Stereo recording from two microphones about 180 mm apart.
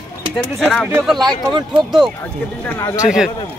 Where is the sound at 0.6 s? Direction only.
Centre (ahead or behind).